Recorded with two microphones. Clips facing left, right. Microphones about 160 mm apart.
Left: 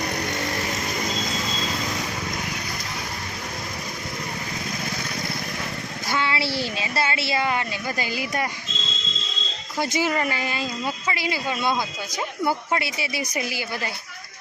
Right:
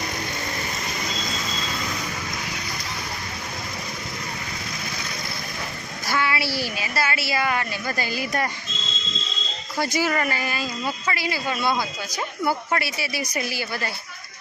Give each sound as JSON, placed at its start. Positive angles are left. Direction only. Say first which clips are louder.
{"t": 6.1, "sound": "speech", "louder": "right 1 dB", "side_deg": 25}
{"t": 9.7, "sound": "speech", "louder": "even", "side_deg": 20}